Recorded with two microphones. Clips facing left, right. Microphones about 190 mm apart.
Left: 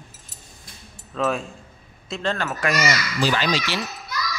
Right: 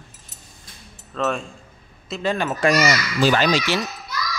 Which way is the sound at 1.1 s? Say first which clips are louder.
Even; 5° left (ahead or behind).